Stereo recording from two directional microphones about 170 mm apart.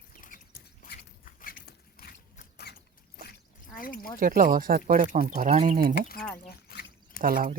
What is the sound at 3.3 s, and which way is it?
Drip, 55° left (ahead or behind).